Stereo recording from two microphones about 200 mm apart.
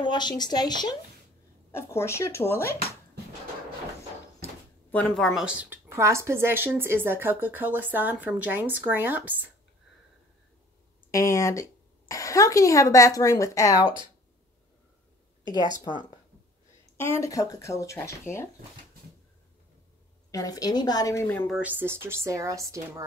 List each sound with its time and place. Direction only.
0.0 s a woman's voice: 20° left (ahead or behind)
4.9 s a woman's voice: centre (ahead or behind)
11.1 s a woman's voice: 15° left (ahead or behind)
15.4 s speech: 20° left (ahead or behind)
16.9 s a woman's voice: 15° left (ahead or behind)
20.2 s a woman's voice: 15° left (ahead or behind)
21.5 s a woman's voice: 5° right (ahead or behind)